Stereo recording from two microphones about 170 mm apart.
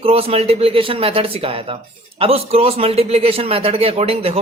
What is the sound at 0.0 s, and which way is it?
A man's voice, 35° right (ahead or behind).